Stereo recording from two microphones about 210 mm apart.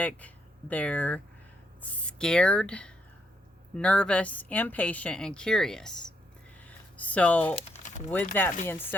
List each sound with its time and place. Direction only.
0.7 s speech: 5° left (ahead or behind)
6.7 s a sound: 5° left (ahead or behind)
7.5 s crumpling: 35° left (ahead or behind)
8.1 s speech: 10° left (ahead or behind)